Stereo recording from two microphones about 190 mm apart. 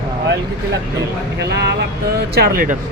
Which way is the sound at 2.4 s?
50° right (ahead or behind).